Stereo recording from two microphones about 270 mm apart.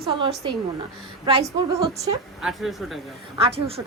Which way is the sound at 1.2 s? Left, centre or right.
Centre.